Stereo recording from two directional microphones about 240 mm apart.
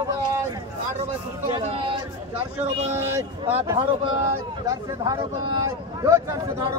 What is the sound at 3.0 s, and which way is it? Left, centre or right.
Speech, centre.